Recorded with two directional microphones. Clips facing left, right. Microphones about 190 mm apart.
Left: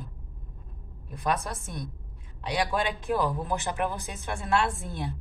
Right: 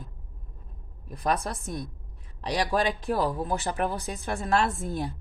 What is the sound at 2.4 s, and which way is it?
A woman's voice, 35° right (ahead or behind).